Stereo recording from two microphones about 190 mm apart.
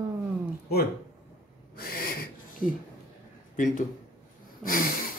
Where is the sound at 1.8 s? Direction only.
50° left (ahead or behind).